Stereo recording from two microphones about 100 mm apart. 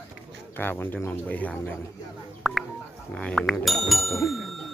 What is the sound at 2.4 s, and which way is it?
Telephone dialing, centre (ahead or behind).